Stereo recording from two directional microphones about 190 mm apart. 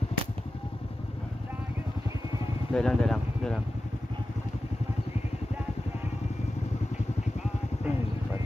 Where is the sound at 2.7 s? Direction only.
5° left (ahead or behind).